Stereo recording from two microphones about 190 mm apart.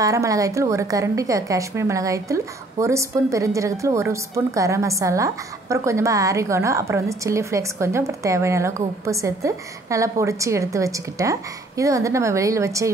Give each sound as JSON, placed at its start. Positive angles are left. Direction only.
{"t": 0.0, "sound": "a woman's voice", "side_deg": -15}